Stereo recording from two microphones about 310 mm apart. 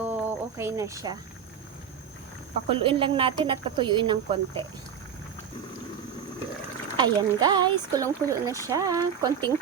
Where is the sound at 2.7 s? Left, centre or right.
Centre.